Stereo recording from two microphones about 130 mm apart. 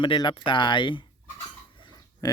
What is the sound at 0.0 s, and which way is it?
Speech, 35° left (ahead or behind).